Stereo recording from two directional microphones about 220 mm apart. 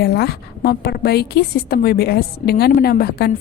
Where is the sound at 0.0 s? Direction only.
45° left (ahead or behind).